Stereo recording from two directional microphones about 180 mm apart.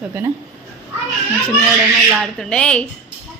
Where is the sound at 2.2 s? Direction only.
5° left (ahead or behind).